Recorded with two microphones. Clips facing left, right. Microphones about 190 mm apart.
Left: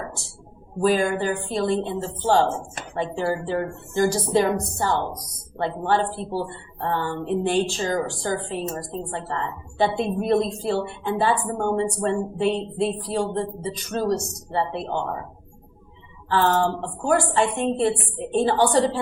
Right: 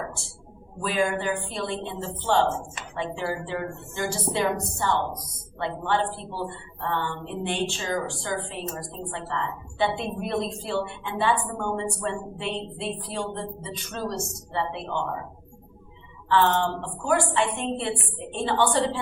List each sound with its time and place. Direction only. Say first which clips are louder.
0.8 s speech: left 5 dB; 40° left (ahead or behind)
16.3 s speech: left 2 dB; 40° left (ahead or behind)